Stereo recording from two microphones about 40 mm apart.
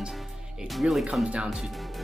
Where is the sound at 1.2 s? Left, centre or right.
Right.